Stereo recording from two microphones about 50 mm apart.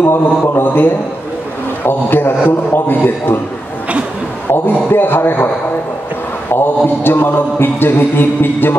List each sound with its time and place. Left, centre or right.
0.0 s mantra: left
4.5 s mantra: left
6.5 s mantra: left